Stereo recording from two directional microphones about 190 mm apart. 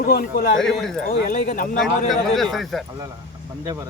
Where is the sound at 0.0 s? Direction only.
50° left (ahead or behind).